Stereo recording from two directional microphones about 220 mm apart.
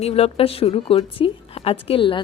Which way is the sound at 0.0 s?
25° left (ahead or behind).